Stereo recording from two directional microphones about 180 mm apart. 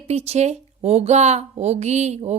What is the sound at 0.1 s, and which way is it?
A woman's voice, 35° right (ahead or behind).